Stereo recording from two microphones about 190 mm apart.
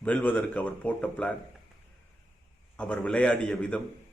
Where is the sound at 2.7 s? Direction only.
5° left (ahead or behind).